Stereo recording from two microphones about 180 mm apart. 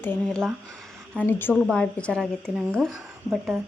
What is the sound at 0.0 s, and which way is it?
A woman's voice, 5° left (ahead or behind).